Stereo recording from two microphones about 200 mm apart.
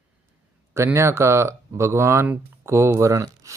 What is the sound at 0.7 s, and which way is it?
Speech, 10° right (ahead or behind).